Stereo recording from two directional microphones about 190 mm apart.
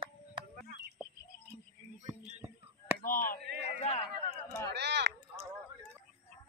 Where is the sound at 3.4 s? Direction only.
65° right (ahead or behind).